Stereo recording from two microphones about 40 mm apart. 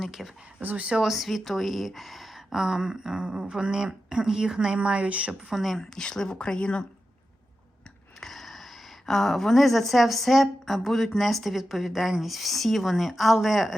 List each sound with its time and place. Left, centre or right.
0.2 s a woman's voice: centre
0.6 s speech: right
1.0 s a woman's voice: centre
2.6 s speech: centre
4.8 s speech: right
5.3 s speech: centre
5.6 s a woman's voice: centre
6.0 s speech: centre
8.2 s a sound: centre
9.0 s a woman's voice: centre